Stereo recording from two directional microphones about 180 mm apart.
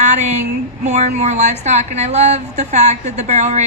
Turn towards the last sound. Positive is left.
turn(degrees=-40)  # may be behind; listen again after turning